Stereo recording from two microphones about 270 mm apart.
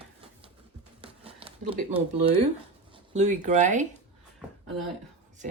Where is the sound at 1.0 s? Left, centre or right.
Right.